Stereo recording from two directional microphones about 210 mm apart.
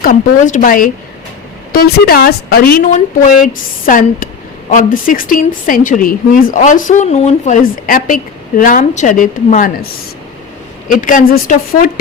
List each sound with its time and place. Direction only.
0.0 s a woman's voice: 40° left (ahead or behind)
10.8 s speech: 40° left (ahead or behind)